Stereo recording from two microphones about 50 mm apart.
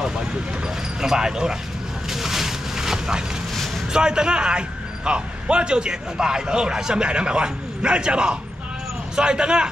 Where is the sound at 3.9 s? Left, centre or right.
Centre.